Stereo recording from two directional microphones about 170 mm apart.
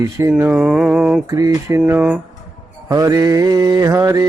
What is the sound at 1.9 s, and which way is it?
Mantra, 10° right (ahead or behind).